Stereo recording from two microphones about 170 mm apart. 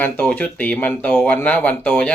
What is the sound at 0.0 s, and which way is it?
Speech, 10° left (ahead or behind).